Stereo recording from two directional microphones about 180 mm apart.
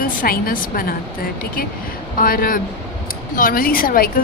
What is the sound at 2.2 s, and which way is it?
A woman's voice, 50° left (ahead or behind).